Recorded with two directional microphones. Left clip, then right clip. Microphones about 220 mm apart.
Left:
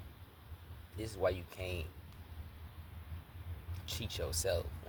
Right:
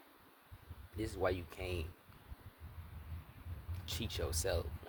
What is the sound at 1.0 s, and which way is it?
Speech, 15° right (ahead or behind).